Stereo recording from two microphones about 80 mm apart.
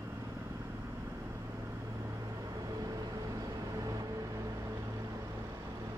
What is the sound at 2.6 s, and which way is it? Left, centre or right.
Vehicle, right.